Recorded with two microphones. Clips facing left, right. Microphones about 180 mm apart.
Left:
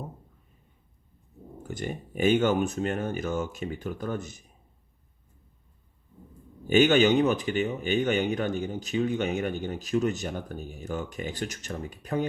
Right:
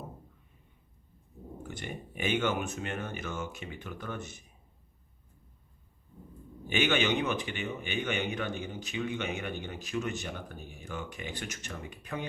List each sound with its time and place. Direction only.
1.6 s speech: 40° left (ahead or behind)
6.7 s speech: 40° left (ahead or behind)